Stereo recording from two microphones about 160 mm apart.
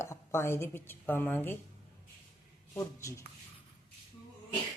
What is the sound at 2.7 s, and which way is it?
Speech, 20° left (ahead or behind).